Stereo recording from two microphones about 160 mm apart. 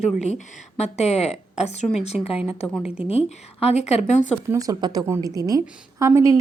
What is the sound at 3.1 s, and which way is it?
A woman's voice, 40° left (ahead or behind).